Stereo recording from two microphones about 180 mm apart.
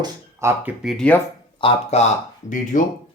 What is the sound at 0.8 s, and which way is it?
Speech, centre (ahead or behind).